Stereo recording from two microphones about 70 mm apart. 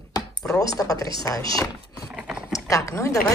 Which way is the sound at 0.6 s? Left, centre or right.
Left.